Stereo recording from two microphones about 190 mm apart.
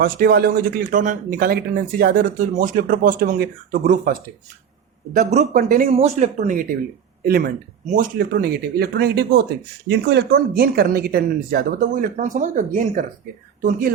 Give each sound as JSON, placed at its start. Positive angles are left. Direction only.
{"t": 0.0, "sound": "speech", "side_deg": -50}
{"t": 5.1, "sound": "speech", "side_deg": -40}
{"t": 7.3, "sound": "speech", "side_deg": -55}